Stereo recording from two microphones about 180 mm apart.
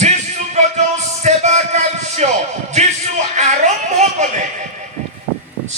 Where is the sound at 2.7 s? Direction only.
40° right (ahead or behind).